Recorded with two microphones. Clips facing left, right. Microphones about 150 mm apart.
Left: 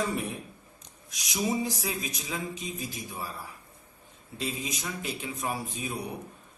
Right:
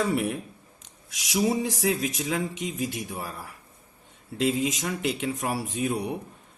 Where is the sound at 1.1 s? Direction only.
90° right.